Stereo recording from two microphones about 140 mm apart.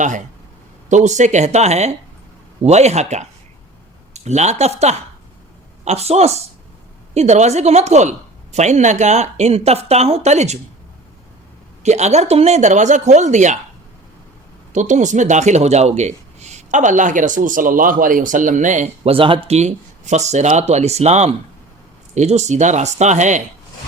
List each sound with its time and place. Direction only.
0.9 s speech: 60° right (ahead or behind)
11.8 s speech: 55° right (ahead or behind)
14.7 s speech: 60° right (ahead or behind)
19.1 s speech: 40° right (ahead or behind); by 23.4 s 60° right (ahead or behind)